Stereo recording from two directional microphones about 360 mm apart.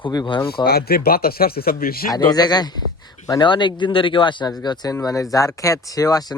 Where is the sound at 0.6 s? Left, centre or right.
Left.